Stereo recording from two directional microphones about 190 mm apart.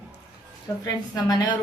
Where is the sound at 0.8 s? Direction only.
20° left (ahead or behind).